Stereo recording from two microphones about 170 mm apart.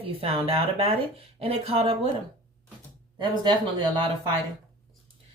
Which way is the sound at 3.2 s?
25° right (ahead or behind).